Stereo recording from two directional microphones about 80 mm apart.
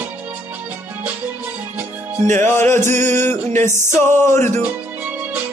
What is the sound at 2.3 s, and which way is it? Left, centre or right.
Music, left.